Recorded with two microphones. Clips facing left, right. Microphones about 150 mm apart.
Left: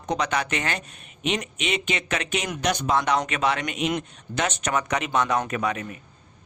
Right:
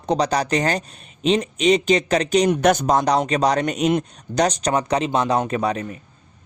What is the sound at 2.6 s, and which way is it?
A man's voice, 50° right (ahead or behind).